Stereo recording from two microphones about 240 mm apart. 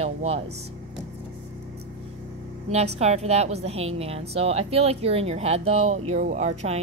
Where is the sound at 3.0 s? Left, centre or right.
Right.